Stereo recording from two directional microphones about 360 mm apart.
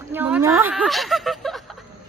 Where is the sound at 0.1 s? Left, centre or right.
Centre.